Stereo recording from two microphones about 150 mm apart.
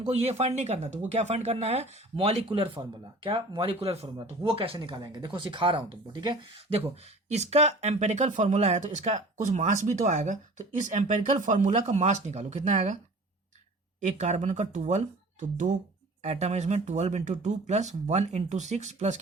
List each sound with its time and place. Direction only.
0.1 s speech: 45° right (ahead or behind)
7.3 s speech: 50° right (ahead or behind)
14.0 s speech: 50° right (ahead or behind)